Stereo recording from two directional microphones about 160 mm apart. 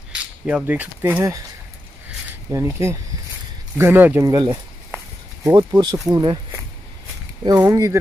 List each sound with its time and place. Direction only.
0.1 s speech: 10° right (ahead or behind)
2.5 s speech: 15° right (ahead or behind)
7.4 s speech: 20° right (ahead or behind)